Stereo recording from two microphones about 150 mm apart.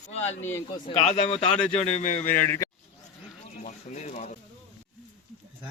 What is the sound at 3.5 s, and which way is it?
Pigeon, 55° left (ahead or behind).